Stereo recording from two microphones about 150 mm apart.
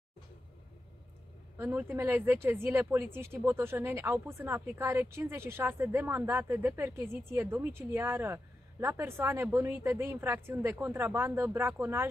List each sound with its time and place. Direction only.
1.6 s speech: 15° right (ahead or behind)